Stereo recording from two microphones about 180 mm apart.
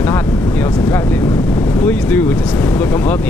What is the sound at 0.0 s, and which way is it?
Vehicle, 10° left (ahead or behind).